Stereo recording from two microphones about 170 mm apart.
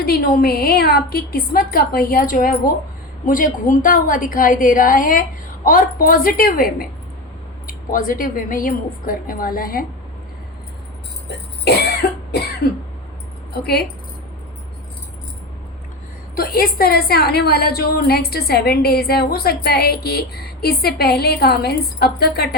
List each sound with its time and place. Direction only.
0.0 s a woman's voice: 65° left (ahead or behind)
12.0 s cough: 65° left (ahead or behind)
13.5 s a woman's voice: 65° left (ahead or behind)
16.3 s a woman's voice: 60° left (ahead or behind)